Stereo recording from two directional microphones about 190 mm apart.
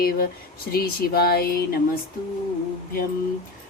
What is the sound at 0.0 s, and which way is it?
Speech, 55° left (ahead or behind).